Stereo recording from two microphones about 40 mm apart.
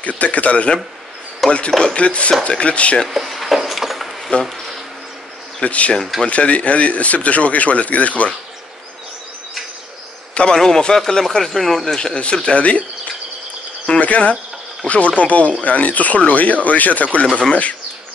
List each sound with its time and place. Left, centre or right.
0.0 s speech: left
1.4 s a sound: centre
2.0 s speech: left
3.1 s a sound: centre
5.6 s speech: left
10.5 s speech: centre
12.0 s speech: left
13.8 s speech: left